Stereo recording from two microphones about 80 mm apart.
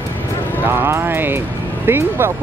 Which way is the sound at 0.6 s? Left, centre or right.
Right.